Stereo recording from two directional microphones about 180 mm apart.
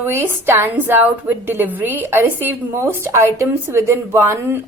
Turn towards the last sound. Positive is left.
turn(degrees=-15)  # may be behind; listen again after turning